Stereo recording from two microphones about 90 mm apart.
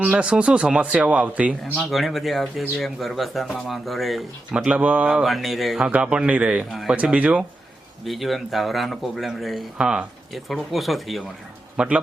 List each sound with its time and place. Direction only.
0.0 s speech: 10° right (ahead or behind)
1.8 s speech: centre (ahead or behind)
5.2 s speech: centre (ahead or behind)
5.8 s speech: 10° right (ahead or behind)
6.7 s speech: centre (ahead or behind)
6.9 s speech: 15° right (ahead or behind)
8.0 s speech: centre (ahead or behind)
11.8 s speech: 10° right (ahead or behind)